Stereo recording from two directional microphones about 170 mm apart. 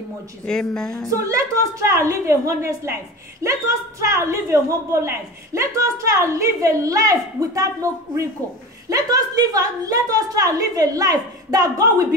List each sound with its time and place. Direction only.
0.5 s a woman's voice: 5° left (ahead or behind)
1.1 s a woman's voice: 20° right (ahead or behind)